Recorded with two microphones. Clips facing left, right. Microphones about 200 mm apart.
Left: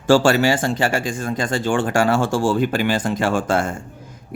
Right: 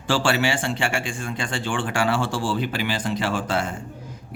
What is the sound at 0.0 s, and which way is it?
Speech, 45° left (ahead or behind).